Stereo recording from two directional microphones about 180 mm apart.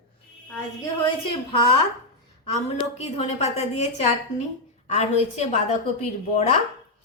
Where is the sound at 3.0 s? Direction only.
35° left (ahead or behind).